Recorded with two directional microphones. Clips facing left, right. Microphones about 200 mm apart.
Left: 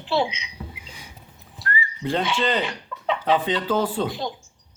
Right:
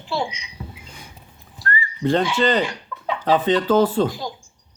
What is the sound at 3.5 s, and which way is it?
Speech, 10° left (ahead or behind).